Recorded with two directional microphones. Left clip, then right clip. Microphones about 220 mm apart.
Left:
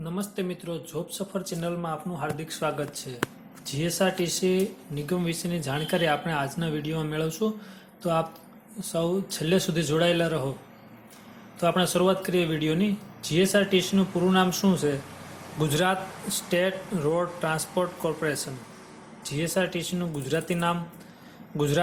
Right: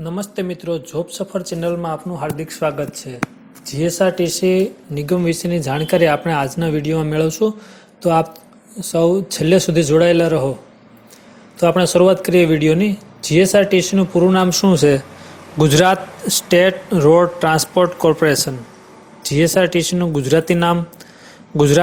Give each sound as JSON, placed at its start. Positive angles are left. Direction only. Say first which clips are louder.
{"t": 0.0, "sound": "speech", "louder": "right 8 dB", "side_deg": -20}
{"t": 8.9, "sound": "speech", "louder": "right 12 dB", "side_deg": -30}
{"t": 11.6, "sound": "a man's voice", "louder": "right 11 dB", "side_deg": -30}